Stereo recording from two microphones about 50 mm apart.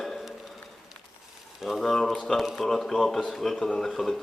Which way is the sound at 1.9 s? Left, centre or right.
Centre.